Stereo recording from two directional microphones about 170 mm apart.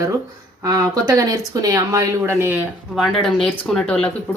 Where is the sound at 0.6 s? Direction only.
20° right (ahead or behind).